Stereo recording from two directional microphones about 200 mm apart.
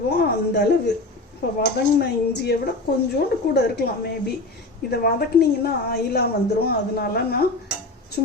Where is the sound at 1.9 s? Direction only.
55° left (ahead or behind).